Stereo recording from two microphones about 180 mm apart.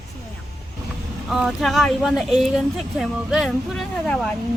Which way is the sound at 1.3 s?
Centre (ahead or behind).